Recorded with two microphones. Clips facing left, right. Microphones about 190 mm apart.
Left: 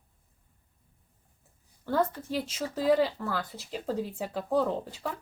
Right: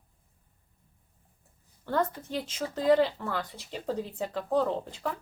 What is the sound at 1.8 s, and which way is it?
A woman's voice, 5° left (ahead or behind).